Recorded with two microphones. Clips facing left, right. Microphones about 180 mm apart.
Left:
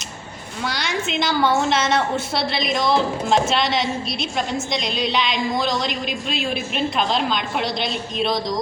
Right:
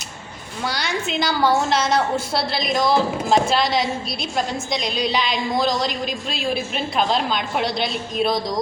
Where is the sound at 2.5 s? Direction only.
Centre (ahead or behind).